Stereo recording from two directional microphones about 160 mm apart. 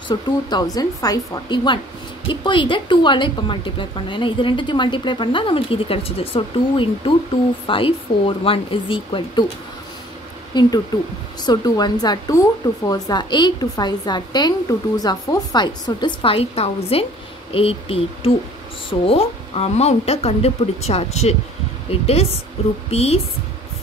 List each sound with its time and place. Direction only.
0.1 s speech: 25° left (ahead or behind)
10.5 s speech: 25° left (ahead or behind)